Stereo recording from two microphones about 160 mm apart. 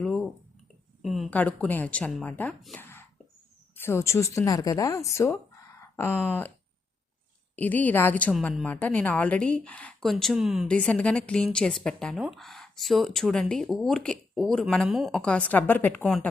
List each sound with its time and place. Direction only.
0.0 s clicking: 5° left (ahead or behind)
1.0 s a woman's voice: centre (ahead or behind)
2.7 s whispering: 15° left (ahead or behind)
3.8 s a woman's voice: 15° left (ahead or behind)
7.5 s a woman's voice: 10° left (ahead or behind)